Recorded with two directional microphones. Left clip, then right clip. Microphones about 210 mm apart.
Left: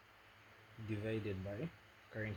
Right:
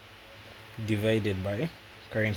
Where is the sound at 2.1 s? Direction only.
45° right (ahead or behind).